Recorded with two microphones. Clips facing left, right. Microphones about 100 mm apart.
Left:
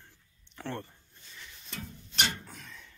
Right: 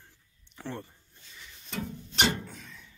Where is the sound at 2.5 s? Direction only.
Centre (ahead or behind).